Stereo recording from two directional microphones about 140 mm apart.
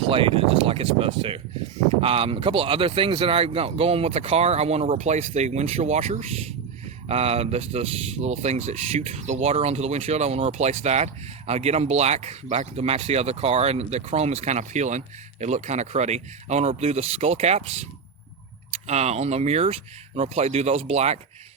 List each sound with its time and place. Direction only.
0.1 s speech: 40° right (ahead or behind)